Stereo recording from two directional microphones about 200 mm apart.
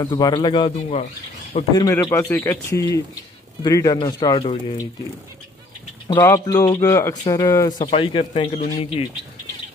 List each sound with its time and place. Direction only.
0.0 s speech: 20° left (ahead or behind)
6.0 s speech: 20° left (ahead or behind)